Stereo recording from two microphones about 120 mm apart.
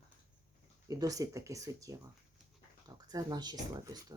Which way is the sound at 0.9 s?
30° right (ahead or behind).